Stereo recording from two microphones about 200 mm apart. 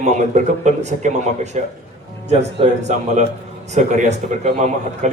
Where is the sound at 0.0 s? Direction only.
35° right (ahead or behind).